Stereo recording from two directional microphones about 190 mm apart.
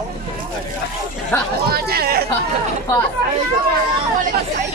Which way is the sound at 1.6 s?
55° right (ahead or behind).